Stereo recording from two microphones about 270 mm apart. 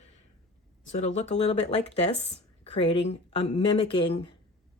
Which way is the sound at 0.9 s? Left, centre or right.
Left.